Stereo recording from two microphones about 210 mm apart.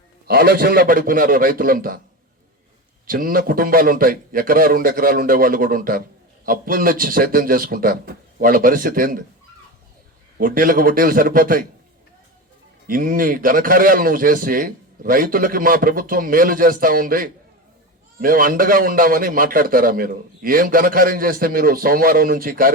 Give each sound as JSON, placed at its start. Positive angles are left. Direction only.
{"t": 0.3, "sound": "a man's voice", "side_deg": -45}
{"t": 3.1, "sound": "a man's voice", "side_deg": -45}
{"t": 10.3, "sound": "a man's voice", "side_deg": -40}
{"t": 12.9, "sound": "a man's voice", "side_deg": -40}